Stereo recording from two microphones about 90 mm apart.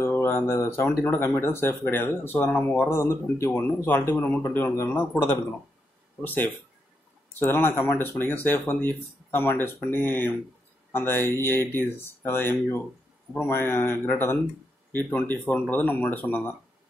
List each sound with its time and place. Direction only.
0.0 s speech: 25° left (ahead or behind)
6.2 s speech: 10° left (ahead or behind)
7.3 s speech: 25° left (ahead or behind)